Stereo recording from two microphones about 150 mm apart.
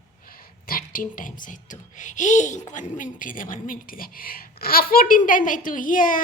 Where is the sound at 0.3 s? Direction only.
75° left (ahead or behind).